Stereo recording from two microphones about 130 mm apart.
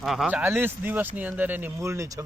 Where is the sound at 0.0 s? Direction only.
Centre (ahead or behind).